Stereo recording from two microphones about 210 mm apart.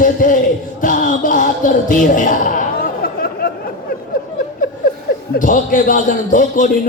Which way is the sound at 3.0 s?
45° left (ahead or behind).